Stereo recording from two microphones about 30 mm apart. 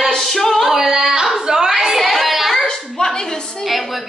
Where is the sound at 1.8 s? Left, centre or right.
Centre.